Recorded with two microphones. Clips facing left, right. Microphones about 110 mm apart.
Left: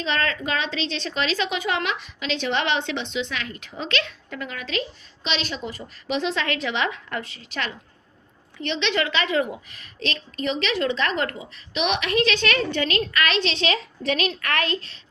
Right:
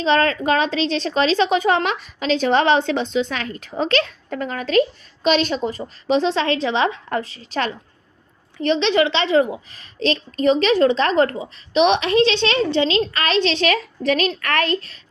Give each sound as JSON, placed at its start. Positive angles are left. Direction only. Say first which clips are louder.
{"t": 0.0, "sound": "a woman's voice", "louder": "right 8 dB", "side_deg": -35}